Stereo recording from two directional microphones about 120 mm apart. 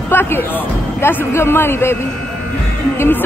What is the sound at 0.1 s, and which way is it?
A man's voice, 20° left (ahead or behind).